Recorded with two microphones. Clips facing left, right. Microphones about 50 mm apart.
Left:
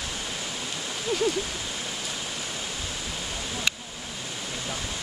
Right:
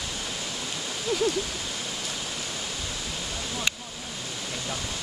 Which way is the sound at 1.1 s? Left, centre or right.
Centre.